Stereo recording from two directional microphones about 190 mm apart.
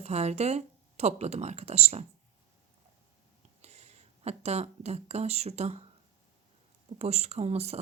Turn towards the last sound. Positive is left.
turn(degrees=-35)  # may be behind; listen again after turning